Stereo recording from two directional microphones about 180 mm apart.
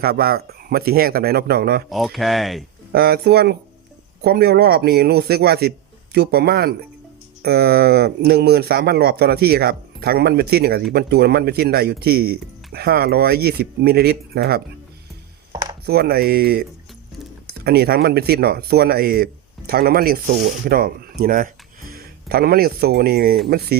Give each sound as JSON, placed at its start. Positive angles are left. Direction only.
{"t": 0.0, "sound": "speech", "side_deg": -60}
{"t": 1.9, "sound": "speech", "side_deg": 0}
{"t": 2.9, "sound": "speech", "side_deg": -60}
{"t": 15.9, "sound": "speech", "side_deg": -60}